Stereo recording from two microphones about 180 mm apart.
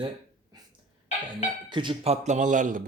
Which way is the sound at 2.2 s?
40° right (ahead or behind).